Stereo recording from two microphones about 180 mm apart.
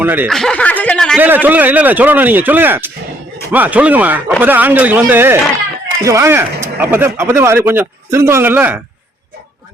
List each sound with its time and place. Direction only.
0.0 s speech: 10° right (ahead or behind)
0.3 s chuckle: centre (ahead or behind)
1.2 s speech: 10° right (ahead or behind)